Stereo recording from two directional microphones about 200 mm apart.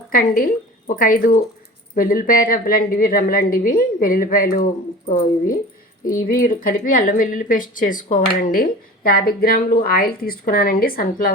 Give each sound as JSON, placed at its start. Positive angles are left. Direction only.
{"t": 0.1, "sound": "speech", "side_deg": 45}